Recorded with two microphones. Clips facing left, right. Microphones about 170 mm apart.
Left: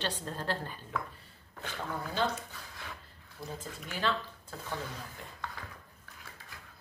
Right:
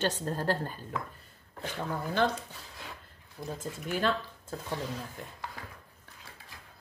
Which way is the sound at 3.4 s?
20° right (ahead or behind).